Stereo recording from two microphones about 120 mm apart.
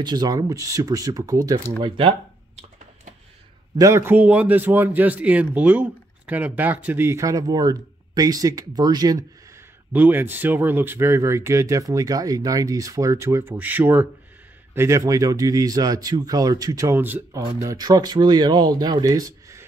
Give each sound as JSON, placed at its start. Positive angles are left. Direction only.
{"t": 0.0, "sound": "speech", "side_deg": -35}
{"t": 1.8, "sound": "speech", "side_deg": -45}
{"t": 3.7, "sound": "a man's voice", "side_deg": -25}
{"t": 9.9, "sound": "speech", "side_deg": -15}